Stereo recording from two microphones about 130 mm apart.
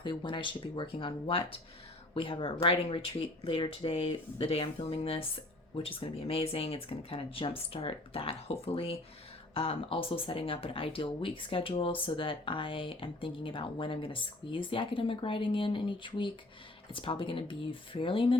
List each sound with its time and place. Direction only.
0.0 s speech: 35° left (ahead or behind)